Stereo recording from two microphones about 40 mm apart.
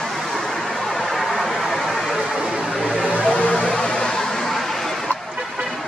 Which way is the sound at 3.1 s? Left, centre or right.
Left.